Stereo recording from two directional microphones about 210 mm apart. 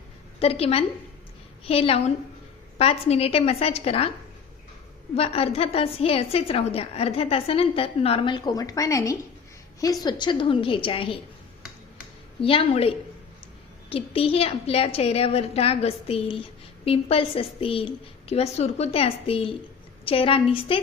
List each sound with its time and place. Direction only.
0.3 s a woman's voice: 30° left (ahead or behind)
5.1 s a woman's voice: 30° left (ahead or behind)
12.4 s a woman's voice: 25° left (ahead or behind)